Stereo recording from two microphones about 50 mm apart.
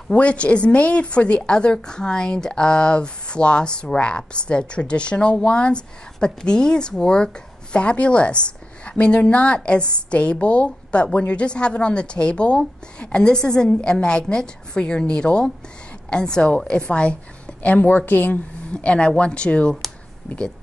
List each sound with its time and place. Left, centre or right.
0.1 s speech: left
18.7 s speech: left